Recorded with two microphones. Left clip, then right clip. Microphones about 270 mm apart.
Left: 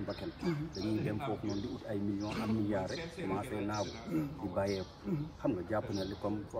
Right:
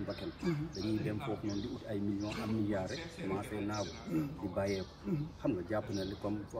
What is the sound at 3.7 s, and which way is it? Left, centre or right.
A man's voice, centre.